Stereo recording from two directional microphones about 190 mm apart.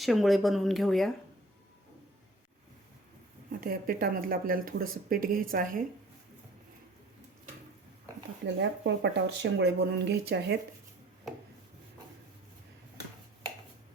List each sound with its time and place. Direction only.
0.0 s speech: centre (ahead or behind)
3.6 s speech: 50° right (ahead or behind)
8.4 s speech: 65° right (ahead or behind)